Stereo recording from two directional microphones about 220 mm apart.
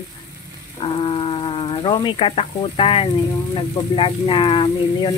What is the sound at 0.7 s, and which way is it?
Speech, 25° left (ahead or behind).